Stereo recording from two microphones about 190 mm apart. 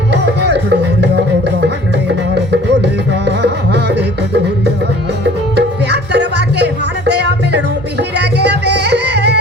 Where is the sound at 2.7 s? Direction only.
60° right (ahead or behind).